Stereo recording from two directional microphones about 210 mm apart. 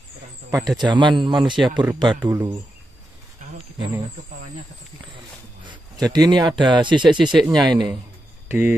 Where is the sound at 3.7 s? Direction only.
20° right (ahead or behind).